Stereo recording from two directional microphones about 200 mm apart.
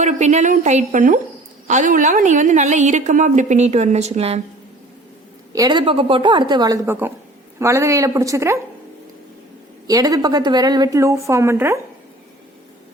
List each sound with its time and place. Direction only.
0.0 s a woman's voice: 35° right (ahead or behind)
5.5 s a woman's voice: 20° right (ahead or behind)
9.8 s a woman's voice: 20° right (ahead or behind)